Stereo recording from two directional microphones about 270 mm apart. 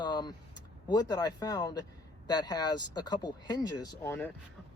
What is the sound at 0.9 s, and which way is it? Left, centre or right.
Speech, centre.